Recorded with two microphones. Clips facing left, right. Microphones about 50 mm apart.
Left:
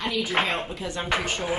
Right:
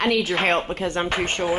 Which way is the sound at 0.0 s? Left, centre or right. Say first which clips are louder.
Right 7 dB; right.